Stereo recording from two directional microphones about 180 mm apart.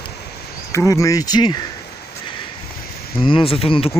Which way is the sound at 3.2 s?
30° left (ahead or behind).